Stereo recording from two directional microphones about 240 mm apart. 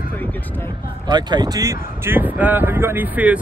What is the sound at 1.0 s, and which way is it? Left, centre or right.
Speech, centre.